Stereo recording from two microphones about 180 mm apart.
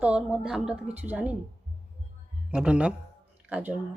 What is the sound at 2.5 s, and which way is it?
Speech, 5° right (ahead or behind).